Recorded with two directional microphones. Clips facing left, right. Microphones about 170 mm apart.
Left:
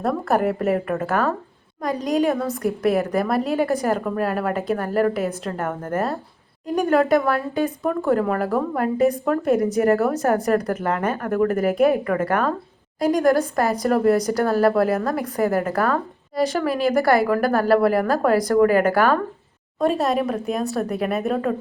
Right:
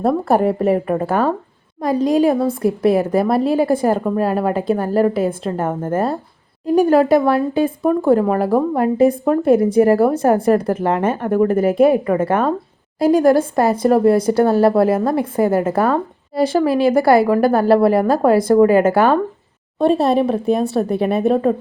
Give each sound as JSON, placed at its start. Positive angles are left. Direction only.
{"t": 0.0, "sound": "speech", "side_deg": -30}